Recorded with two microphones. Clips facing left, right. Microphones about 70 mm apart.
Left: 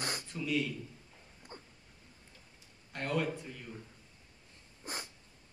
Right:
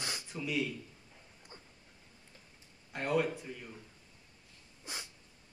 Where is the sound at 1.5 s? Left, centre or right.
Left.